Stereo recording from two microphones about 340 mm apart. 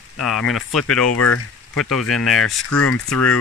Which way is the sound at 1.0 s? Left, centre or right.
Left.